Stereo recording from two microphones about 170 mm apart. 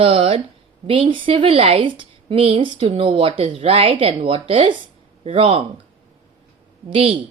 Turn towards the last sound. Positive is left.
turn(degrees=-30)  # may be behind; listen again after turning